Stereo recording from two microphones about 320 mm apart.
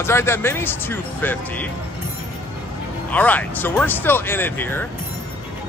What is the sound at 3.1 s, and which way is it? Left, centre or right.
Speech, centre.